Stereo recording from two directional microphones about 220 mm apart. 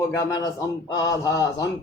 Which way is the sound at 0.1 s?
15° left (ahead or behind).